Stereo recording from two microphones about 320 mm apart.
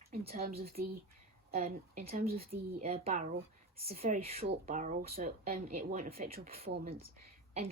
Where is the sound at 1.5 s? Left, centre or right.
Right.